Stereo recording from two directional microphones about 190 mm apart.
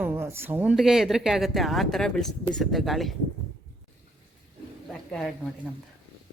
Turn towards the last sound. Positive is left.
turn(degrees=0)  # may be behind; listen again after turning